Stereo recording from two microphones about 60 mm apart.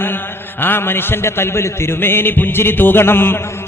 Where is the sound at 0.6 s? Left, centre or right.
Left.